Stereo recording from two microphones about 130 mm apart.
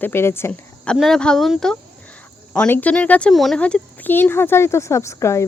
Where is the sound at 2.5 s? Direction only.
15° left (ahead or behind).